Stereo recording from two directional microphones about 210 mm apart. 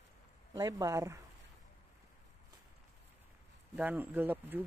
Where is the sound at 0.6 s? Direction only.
15° right (ahead or behind).